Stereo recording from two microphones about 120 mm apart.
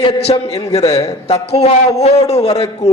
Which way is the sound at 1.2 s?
60° left (ahead or behind).